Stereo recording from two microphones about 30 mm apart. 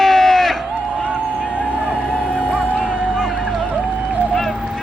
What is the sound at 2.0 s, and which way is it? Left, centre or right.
Music, left.